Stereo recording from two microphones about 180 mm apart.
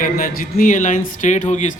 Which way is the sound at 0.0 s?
50° left (ahead or behind).